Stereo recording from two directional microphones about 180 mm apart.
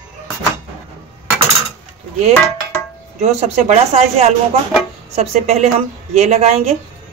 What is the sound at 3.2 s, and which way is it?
A woman's voice, 35° right (ahead or behind).